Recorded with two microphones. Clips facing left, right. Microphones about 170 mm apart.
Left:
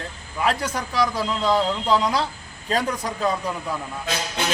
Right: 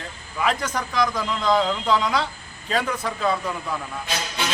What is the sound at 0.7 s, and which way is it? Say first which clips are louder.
A man's voice: even; 35° left (ahead or behind).